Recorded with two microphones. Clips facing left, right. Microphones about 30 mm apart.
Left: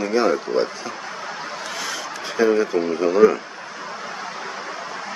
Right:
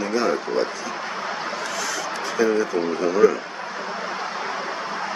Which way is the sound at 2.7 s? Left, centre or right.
Centre.